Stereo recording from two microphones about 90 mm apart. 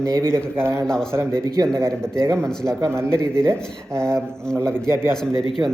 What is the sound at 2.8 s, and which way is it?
Speech, 30° right (ahead or behind).